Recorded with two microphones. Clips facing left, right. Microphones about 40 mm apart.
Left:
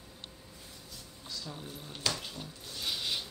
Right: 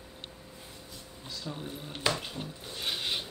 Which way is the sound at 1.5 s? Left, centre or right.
Right.